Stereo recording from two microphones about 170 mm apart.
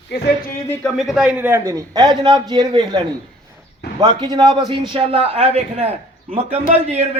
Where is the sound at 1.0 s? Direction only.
5° right (ahead or behind).